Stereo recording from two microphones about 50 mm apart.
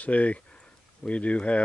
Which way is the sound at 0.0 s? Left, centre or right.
Left.